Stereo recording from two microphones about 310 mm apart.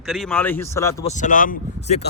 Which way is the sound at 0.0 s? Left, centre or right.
Centre.